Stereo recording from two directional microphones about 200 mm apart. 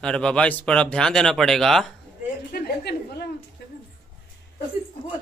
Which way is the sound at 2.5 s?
55° left (ahead or behind).